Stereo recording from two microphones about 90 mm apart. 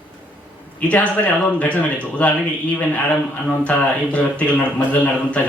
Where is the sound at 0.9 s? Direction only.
15° left (ahead or behind).